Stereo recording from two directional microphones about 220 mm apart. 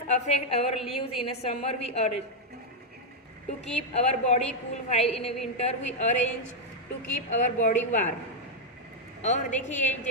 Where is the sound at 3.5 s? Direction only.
30° left (ahead or behind).